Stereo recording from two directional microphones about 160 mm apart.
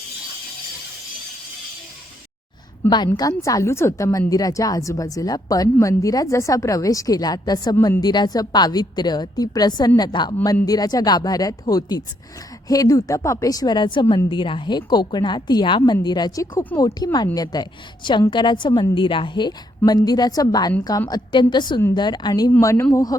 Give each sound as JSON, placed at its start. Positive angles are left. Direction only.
{"t": 3.2, "sound": "a woman's voice", "side_deg": 20}